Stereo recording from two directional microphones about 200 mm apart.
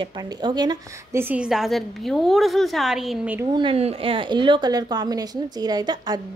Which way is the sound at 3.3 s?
25° right (ahead or behind).